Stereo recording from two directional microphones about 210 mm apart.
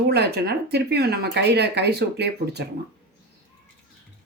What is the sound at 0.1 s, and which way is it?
Speech, 50° right (ahead or behind).